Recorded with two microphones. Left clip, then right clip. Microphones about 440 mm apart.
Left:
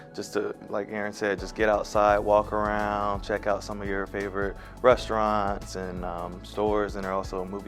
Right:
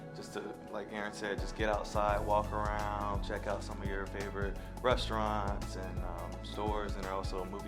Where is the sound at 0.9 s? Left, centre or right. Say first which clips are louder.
Left 9 dB; left.